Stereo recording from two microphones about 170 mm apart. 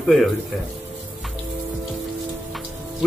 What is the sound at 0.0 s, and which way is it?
Speech, centre (ahead or behind).